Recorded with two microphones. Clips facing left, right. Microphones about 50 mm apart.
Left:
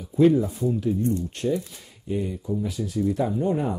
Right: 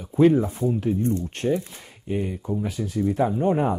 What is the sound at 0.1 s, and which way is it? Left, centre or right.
Speech, right.